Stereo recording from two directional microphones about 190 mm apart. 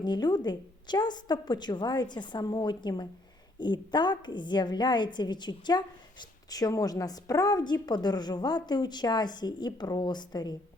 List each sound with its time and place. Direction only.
0.0 s a woman's voice: 25° left (ahead or behind)